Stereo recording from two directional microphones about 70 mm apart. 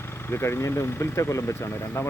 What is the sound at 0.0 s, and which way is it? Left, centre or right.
Speech, left.